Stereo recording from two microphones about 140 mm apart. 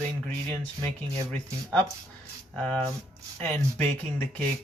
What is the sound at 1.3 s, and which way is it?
Speech, 10° left (ahead or behind).